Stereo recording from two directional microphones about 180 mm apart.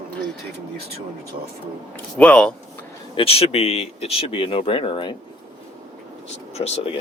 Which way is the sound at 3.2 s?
35° left (ahead or behind).